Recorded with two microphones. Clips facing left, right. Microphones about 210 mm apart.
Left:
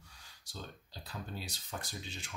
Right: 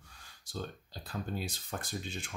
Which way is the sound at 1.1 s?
50° right (ahead or behind).